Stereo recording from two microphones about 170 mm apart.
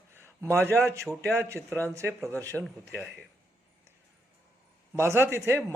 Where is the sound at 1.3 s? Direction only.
15° right (ahead or behind).